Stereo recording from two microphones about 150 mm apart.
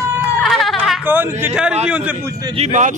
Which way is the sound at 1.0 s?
10° right (ahead or behind).